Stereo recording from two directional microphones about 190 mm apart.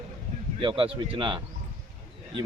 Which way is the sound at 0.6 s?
25° right (ahead or behind).